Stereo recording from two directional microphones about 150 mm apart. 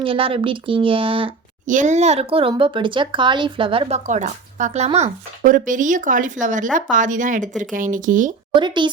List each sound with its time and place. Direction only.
0.0 s speech: 35° right (ahead or behind)
1.6 s speech: 55° right (ahead or behind)
5.4 s speech: 65° right (ahead or behind)
8.5 s speech: 30° right (ahead or behind)